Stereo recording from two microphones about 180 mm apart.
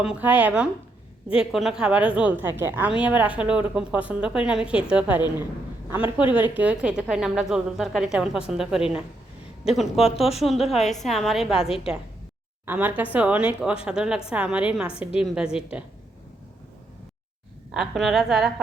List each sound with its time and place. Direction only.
0.0 s a woman's voice: 5° right (ahead or behind)
10.0 s speech: 35° left (ahead or behind)
10.4 s a woman's voice: centre (ahead or behind)
17.7 s a woman's voice: centre (ahead or behind)